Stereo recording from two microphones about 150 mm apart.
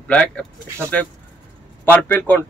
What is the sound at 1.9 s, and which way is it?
Speech, 15° left (ahead or behind).